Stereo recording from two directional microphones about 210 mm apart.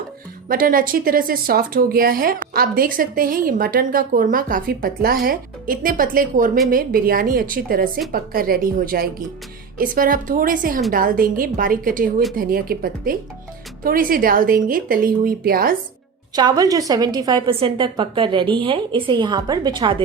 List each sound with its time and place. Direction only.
0.4 s a woman's voice: 40° right (ahead or behind)
16.3 s a woman's voice: 20° right (ahead or behind)